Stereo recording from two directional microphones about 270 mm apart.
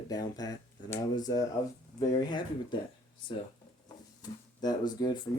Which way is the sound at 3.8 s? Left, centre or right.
Centre.